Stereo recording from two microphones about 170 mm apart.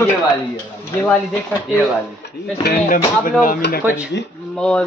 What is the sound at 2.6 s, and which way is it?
Speech, 55° left (ahead or behind).